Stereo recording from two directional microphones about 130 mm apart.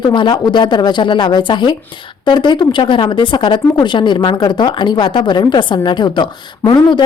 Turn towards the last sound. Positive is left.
turn(degrees=35)  # may be behind; listen again after turning